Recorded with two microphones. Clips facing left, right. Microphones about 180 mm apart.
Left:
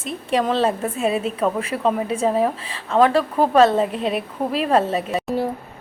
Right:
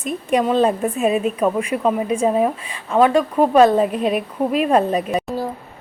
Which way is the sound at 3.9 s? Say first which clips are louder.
Right 3 dB; 25° left (ahead or behind).